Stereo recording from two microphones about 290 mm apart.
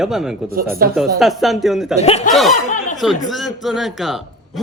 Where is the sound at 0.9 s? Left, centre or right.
Centre.